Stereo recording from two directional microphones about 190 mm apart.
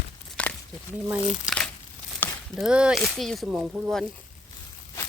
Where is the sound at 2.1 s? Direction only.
10° left (ahead or behind).